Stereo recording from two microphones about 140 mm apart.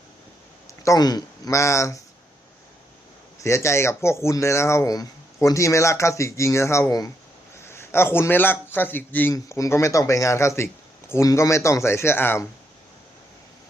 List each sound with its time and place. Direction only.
0.7 s speech: 20° left (ahead or behind)
3.4 s a man's voice: 20° left (ahead or behind)